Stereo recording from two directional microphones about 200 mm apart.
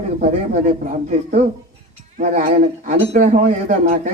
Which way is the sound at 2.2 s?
40° right (ahead or behind).